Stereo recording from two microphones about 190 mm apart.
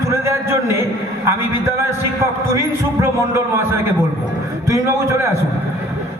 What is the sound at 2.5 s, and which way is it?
A man's voice, 15° right (ahead or behind).